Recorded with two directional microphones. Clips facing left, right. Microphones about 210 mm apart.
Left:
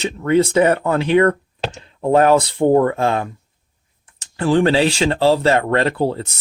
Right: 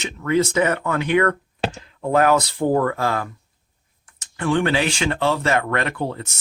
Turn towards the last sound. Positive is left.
turn(degrees=30)  # may be behind; listen again after turning